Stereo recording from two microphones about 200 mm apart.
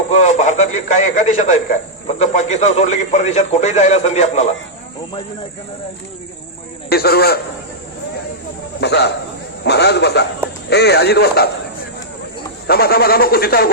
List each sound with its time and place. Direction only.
0.1 s a man's voice: 35° left (ahead or behind)
6.9 s speech: 50° left (ahead or behind)
8.8 s a man's voice: 55° left (ahead or behind)
12.6 s speech: 50° left (ahead or behind)